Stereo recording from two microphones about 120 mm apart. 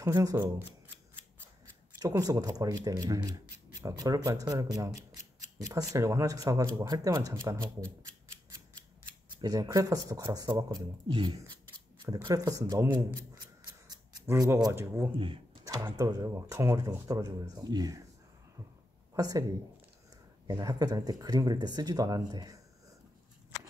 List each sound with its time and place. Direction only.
0.0 s speech: 30° right (ahead or behind)
2.0 s speech: 30° right (ahead or behind)
4.9 s scissors: 70° left (ahead or behind)
5.7 s speech: 25° right (ahead or behind)
9.3 s speech: 30° right (ahead or behind)
12.9 s a sound: 35° right (ahead or behind)
14.2 s speech: 25° right (ahead or behind)
19.1 s speech: 30° right (ahead or behind)
20.4 s speech: 30° right (ahead or behind)